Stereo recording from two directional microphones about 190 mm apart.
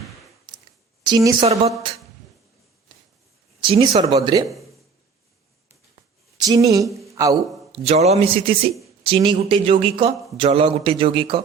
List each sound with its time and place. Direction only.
1.0 s speech: 20° right (ahead or behind)
3.6 s speech: 30° right (ahead or behind)
6.4 s speech: 20° right (ahead or behind)
7.7 s a man's voice: 35° right (ahead or behind)